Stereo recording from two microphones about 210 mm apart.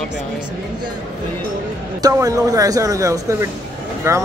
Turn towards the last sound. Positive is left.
turn(degrees=-10)  # may be behind; listen again after turning